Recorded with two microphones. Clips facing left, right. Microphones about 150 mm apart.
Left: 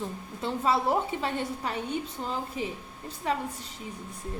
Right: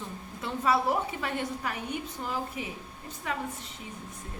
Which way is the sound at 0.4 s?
25° left (ahead or behind).